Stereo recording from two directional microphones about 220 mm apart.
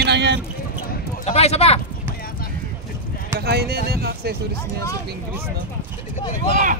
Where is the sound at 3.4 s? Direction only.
45° right (ahead or behind).